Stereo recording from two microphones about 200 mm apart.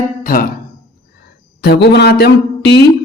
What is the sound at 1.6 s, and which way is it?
Speech, 55° left (ahead or behind).